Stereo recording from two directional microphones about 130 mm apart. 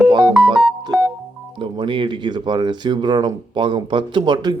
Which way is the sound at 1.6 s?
40° right (ahead or behind).